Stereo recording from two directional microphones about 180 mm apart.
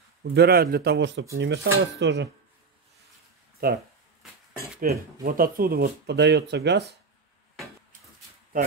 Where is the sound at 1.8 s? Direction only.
75° right (ahead or behind).